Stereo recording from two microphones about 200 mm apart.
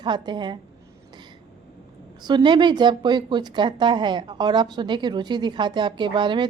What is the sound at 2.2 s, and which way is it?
A woman's voice, 25° right (ahead or behind).